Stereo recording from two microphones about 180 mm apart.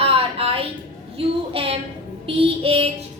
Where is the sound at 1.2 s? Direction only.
30° right (ahead or behind).